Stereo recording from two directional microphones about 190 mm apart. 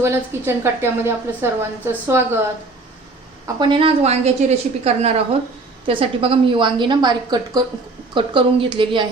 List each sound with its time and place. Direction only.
0.0 s a woman's voice: 15° right (ahead or behind)
3.4 s a woman's voice: 25° right (ahead or behind)